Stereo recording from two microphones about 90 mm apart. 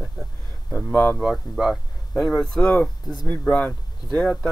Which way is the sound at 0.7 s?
20° left (ahead or behind).